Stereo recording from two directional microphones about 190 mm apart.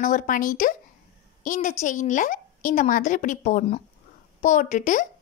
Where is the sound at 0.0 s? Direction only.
45° left (ahead or behind).